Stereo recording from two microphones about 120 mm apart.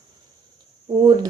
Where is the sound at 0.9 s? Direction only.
40° right (ahead or behind).